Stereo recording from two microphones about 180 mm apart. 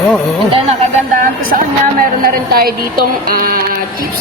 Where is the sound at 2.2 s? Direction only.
55° right (ahead or behind).